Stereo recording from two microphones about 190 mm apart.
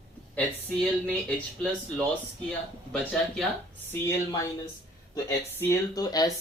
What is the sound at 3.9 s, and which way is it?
Speech, 15° left (ahead or behind).